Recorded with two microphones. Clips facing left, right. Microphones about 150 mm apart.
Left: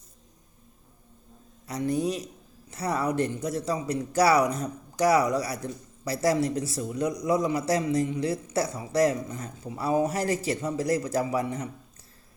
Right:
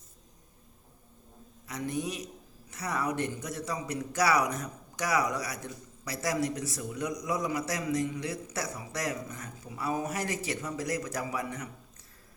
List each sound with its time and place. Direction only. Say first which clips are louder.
1.6 s a man's voice: left 7 dB; 35° left (ahead or behind)